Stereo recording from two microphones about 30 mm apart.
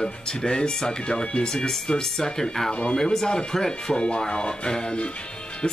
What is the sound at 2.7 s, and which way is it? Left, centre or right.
Speech, left.